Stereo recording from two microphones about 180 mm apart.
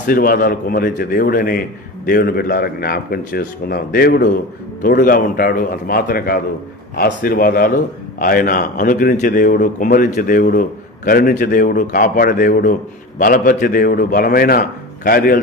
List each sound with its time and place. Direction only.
0.0 s a man's voice: 55° left (ahead or behind)